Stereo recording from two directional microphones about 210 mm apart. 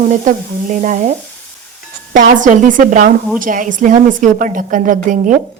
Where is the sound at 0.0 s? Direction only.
35° right (ahead or behind).